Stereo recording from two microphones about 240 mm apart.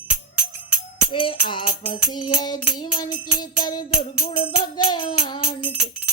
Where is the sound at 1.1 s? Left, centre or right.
Centre.